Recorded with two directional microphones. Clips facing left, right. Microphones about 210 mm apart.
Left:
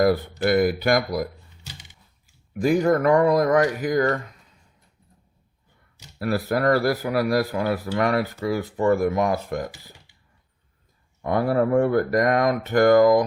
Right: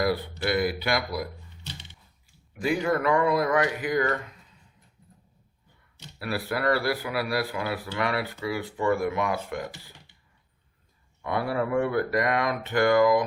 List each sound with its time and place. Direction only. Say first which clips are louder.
0.0 s speech: left 6 dB; 45° left (ahead or behind)
2.6 s speech: left 6 dB; 40° left (ahead or behind)
6.1 s speech: left 6 dB; 45° left (ahead or behind)
11.2 s speech: left 6 dB; 45° left (ahead or behind)